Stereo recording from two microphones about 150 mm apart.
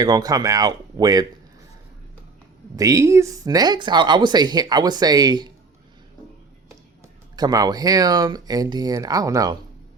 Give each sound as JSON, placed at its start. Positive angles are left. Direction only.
{"t": 0.0, "sound": "speech", "side_deg": -25}
{"t": 2.7, "sound": "speech", "side_deg": -20}
{"t": 7.3, "sound": "speech", "side_deg": -25}